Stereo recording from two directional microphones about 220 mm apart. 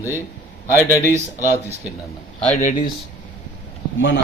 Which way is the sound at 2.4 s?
35° left (ahead or behind).